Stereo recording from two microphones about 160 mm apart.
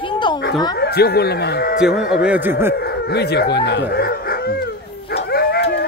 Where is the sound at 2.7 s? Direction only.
90° left; by 4.5 s 70° left (ahead or behind).